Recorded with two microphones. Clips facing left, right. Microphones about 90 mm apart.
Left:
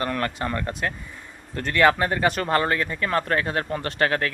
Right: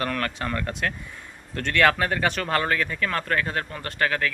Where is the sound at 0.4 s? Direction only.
25° left (ahead or behind).